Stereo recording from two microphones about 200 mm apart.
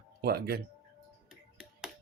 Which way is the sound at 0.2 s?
50° right (ahead or behind).